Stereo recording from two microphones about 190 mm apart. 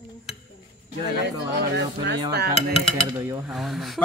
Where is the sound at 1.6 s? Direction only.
60° right (ahead or behind).